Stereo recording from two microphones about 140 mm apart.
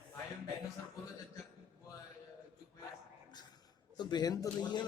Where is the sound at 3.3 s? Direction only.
30° left (ahead or behind).